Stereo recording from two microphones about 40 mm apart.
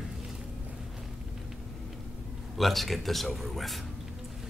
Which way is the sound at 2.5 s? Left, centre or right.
Centre.